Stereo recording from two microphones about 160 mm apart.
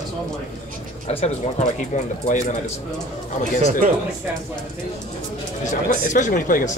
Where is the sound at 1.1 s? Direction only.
40° left (ahead or behind).